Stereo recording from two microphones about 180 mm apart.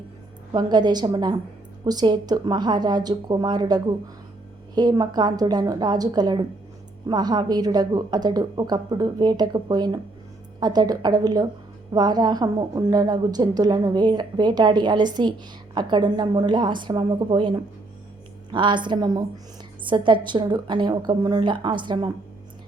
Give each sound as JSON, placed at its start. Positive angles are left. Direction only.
{"t": 0.5, "sound": "a woman's voice", "side_deg": -25}